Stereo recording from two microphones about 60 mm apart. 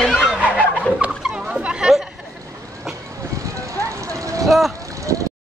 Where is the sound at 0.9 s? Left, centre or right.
Centre.